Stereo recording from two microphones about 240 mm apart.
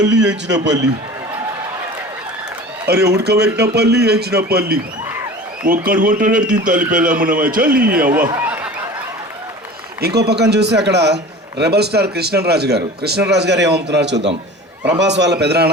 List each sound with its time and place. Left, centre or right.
0.5 s a man's voice: centre
2.8 s a man's voice: right
8.3 s a sound: centre
10.0 s a man's voice: right